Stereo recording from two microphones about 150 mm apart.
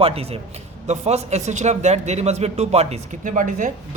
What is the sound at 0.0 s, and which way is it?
A man's voice, 40° right (ahead or behind).